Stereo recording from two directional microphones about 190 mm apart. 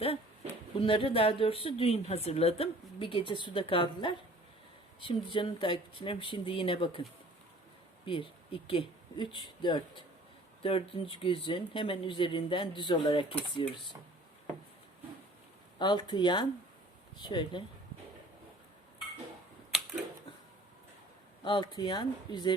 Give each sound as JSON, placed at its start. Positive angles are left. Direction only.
{"t": 0.8, "sound": "a woman's voice", "side_deg": 30}
{"t": 8.0, "sound": "a woman's voice", "side_deg": 30}
{"t": 15.8, "sound": "a woman's voice", "side_deg": 25}
{"t": 21.4, "sound": "a woman's voice", "side_deg": 25}